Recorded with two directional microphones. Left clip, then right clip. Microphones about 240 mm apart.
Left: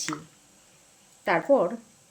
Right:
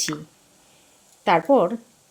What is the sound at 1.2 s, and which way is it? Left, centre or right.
Speech, right.